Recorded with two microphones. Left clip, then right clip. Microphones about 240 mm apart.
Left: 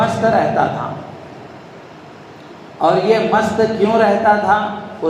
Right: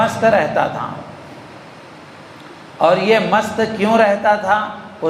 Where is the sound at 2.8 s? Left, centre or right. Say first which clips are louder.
Even; right.